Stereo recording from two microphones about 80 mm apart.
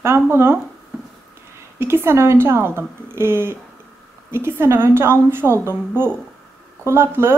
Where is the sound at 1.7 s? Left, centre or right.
Right.